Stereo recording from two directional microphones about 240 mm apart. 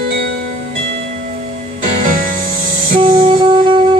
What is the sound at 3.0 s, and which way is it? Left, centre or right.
Music, right.